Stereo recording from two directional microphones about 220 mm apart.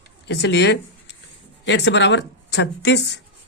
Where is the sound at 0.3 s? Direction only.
50° left (ahead or behind).